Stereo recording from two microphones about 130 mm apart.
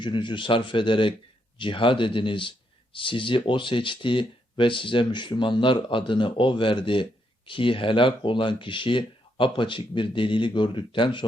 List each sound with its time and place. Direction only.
0.0 s speech: 40° left (ahead or behind)